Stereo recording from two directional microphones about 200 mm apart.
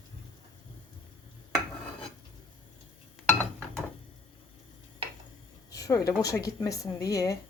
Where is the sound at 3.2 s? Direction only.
5° left (ahead or behind).